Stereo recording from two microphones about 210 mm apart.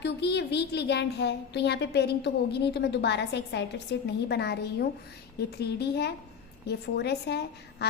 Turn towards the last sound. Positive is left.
turn(degrees=50)  # may be behind; listen again after turning